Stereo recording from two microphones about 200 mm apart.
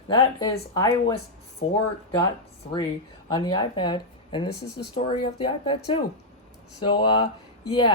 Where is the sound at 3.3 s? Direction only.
25° left (ahead or behind).